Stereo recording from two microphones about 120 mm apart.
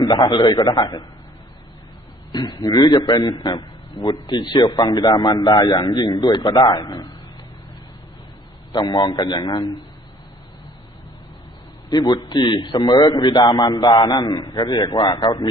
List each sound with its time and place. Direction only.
0.0 s a man's voice: 35° left (ahead or behind)
2.3 s a man's voice: 35° left (ahead or behind)
8.7 s a man's voice: 35° left (ahead or behind)
11.9 s a man's voice: 35° left (ahead or behind)